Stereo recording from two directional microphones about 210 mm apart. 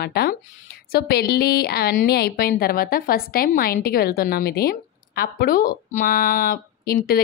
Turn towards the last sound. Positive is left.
turn(degrees=45)  # may be behind; listen again after turning